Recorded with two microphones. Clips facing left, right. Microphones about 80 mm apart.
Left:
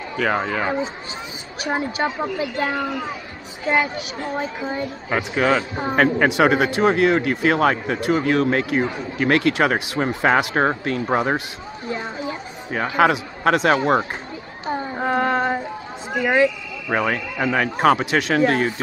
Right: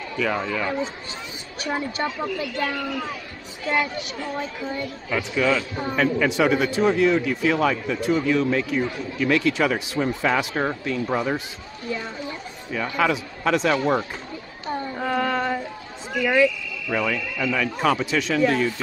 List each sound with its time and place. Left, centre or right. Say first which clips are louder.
0.1 s speech: left 3 dB; left
2.0 s a woman's voice: left 3 dB; left
4.4 s speech: left 4 dB; left
5.1 s speech: left 3 dB; left
9.9 s speech: left 5 dB; left
12.9 s speech: left 6 dB; left
14.7 s child singing: left 3 dB; centre
15.0 s a sound: left 4 dB; left
16.1 s speech: left 2 dB; left